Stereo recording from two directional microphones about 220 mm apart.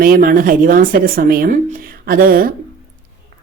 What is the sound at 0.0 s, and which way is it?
Speech, 40° right (ahead or behind).